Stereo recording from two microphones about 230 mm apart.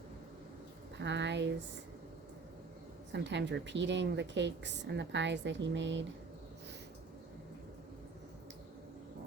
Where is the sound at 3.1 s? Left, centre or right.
Right.